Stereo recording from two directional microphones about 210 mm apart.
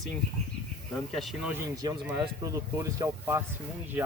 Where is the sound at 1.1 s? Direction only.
5° right (ahead or behind).